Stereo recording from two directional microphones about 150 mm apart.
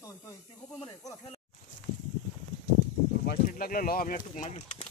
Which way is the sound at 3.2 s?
75° left (ahead or behind).